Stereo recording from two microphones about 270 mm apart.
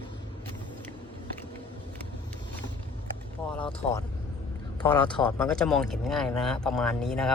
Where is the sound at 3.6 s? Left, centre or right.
Centre.